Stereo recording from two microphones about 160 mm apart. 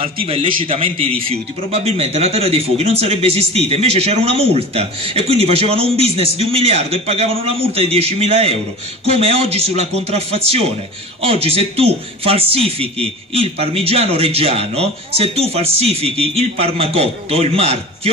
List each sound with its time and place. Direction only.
0.0 s a man's voice: 35° right (ahead or behind)